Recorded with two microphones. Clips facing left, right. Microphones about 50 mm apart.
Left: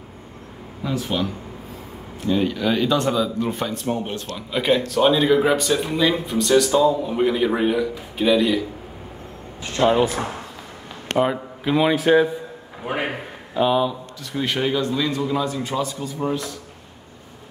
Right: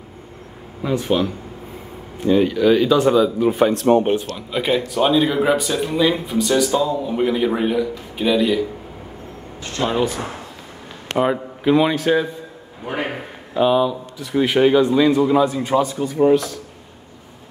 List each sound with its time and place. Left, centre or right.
0.9 s speech: centre
3.7 s speech: right
4.4 s speech: centre
9.8 s speech: centre
11.1 s speech: centre
13.6 s speech: centre
14.3 s a man's voice: centre; by 16.3 s right